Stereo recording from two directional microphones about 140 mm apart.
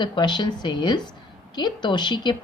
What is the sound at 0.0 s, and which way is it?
Speech, 35° left (ahead or behind).